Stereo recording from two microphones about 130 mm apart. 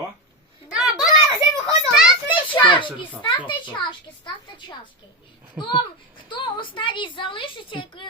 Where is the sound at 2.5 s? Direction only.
40° left (ahead or behind).